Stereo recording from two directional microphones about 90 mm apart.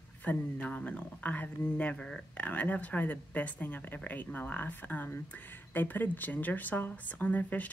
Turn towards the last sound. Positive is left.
turn(degrees=20)  # may be behind; listen again after turning